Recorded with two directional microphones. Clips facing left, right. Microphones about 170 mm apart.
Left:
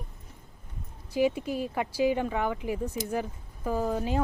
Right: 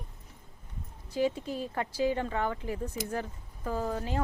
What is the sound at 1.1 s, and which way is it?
Speech, 10° left (ahead or behind).